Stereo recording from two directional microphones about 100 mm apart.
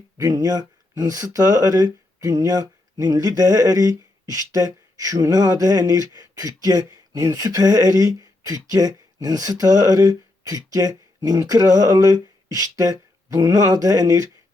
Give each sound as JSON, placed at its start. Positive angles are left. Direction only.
{"t": 0.2, "sound": "speech", "side_deg": -40}